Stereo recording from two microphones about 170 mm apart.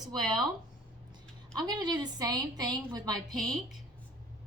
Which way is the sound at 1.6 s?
25° right (ahead or behind).